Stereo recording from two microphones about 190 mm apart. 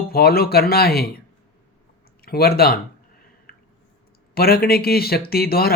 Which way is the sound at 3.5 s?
50° left (ahead or behind).